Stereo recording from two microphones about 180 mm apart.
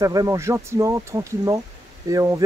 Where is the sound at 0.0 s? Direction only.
20° right (ahead or behind).